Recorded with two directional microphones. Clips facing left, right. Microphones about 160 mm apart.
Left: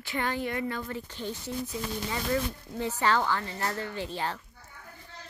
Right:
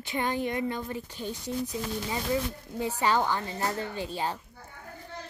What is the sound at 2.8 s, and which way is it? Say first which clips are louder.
A woman's voice: right 1 dB; 15° right (ahead or behind).